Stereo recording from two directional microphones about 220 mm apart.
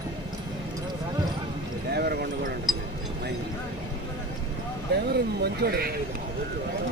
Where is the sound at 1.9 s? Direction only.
45° right (ahead or behind).